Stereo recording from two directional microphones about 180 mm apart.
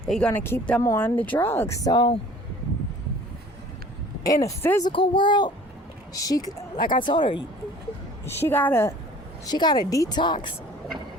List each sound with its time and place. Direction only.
0.0 s speech: 5° left (ahead or behind); by 2.1 s 25° left (ahead or behind)
4.4 s speech: 15° left (ahead or behind)
4.9 s speech: 25° left (ahead or behind)
8.2 s speech: 15° left (ahead or behind)
9.5 s speech: 25° left (ahead or behind)